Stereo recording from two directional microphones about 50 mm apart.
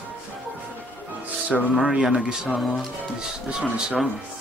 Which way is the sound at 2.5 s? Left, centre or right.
Centre.